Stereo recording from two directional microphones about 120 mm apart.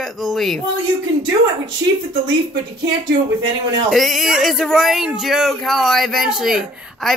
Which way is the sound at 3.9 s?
Centre (ahead or behind).